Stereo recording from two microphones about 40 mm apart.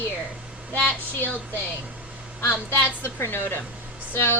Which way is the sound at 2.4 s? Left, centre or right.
Left.